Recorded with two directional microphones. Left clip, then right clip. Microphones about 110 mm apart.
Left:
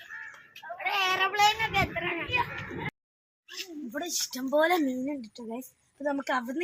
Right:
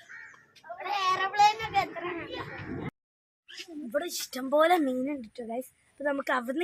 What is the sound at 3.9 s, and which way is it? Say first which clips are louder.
A woman's voice: right 2 dB; 20° right (ahead or behind).